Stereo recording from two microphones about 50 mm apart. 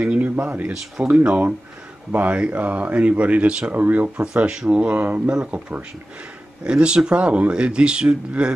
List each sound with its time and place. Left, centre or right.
0.4 s speech: right
3.7 s speech: right
4.2 s speech: right